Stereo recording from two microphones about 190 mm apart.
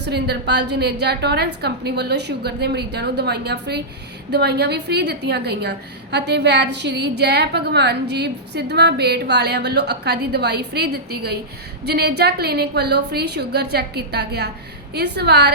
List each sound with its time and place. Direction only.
0.0 s a woman's voice: 60° right (ahead or behind)